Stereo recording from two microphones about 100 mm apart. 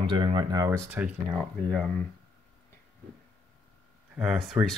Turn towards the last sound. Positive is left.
turn(degrees=-5)  # may be behind; listen again after turning